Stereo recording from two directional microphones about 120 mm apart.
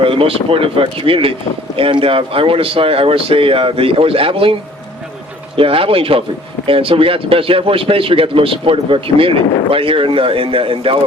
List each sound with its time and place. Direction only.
0.0 s speech: 50° right (ahead or behind)
5.5 s speech: 50° right (ahead or behind)